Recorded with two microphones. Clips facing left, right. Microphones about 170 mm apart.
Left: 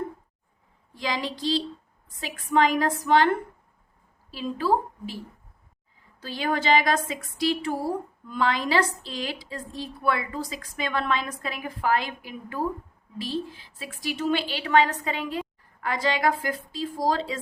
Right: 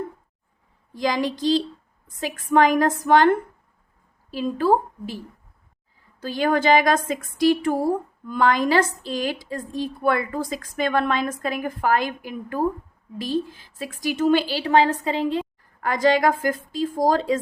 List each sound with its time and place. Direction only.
0.9 s a woman's voice: 45° right (ahead or behind)
4.3 s a woman's voice: 50° right (ahead or behind)
6.2 s a woman's voice: 45° right (ahead or behind); by 15.4 s 30° right (ahead or behind)
15.8 s a woman's voice: 45° right (ahead or behind)